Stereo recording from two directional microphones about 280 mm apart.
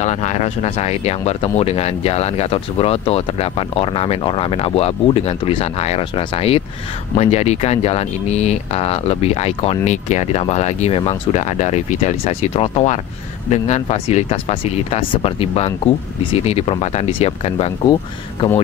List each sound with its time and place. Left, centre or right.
0.0 s speech: left